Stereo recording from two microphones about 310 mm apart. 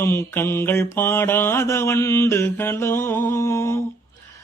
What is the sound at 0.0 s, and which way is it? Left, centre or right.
Mantra, centre.